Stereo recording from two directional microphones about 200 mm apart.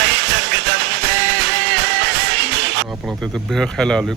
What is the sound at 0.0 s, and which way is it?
Music, 65° right (ahead or behind).